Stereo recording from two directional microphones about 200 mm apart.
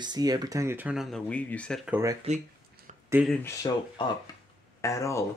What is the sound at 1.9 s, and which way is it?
Speech, 15° right (ahead or behind).